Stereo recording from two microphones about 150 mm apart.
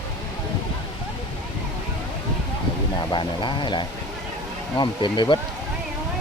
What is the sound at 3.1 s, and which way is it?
Speech, 30° left (ahead or behind).